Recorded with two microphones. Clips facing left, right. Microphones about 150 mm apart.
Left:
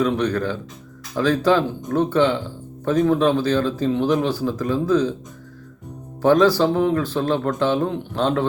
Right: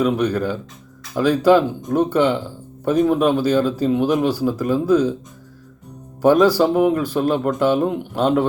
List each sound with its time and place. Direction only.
0.0 s speech: 10° right (ahead or behind)
6.2 s speech: 10° right (ahead or behind)